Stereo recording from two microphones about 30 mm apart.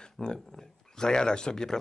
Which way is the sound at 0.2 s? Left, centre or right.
Left.